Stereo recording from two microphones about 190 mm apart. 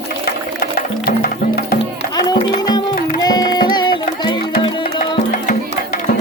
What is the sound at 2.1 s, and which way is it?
Music, 20° left (ahead or behind).